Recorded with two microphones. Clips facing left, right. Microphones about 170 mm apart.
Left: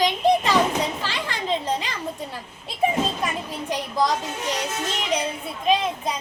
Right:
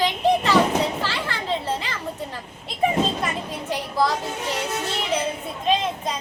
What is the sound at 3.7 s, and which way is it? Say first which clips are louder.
A child's voice: even; 15° left (ahead or behind).